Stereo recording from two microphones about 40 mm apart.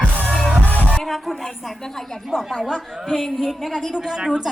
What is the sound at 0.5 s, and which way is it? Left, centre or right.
Music, left.